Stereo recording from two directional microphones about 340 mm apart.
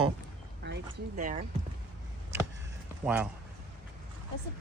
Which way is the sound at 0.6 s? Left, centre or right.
Right.